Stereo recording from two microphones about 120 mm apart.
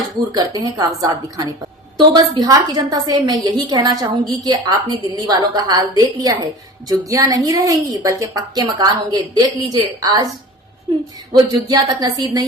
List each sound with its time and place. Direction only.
0.3 s a woman's voice: 30° right (ahead or behind)
11.3 s a woman's voice: 35° right (ahead or behind)